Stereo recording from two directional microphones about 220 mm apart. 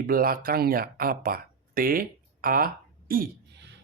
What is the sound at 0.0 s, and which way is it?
Speech, 40° right (ahead or behind).